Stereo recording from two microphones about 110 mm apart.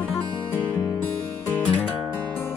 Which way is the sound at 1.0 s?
15° left (ahead or behind).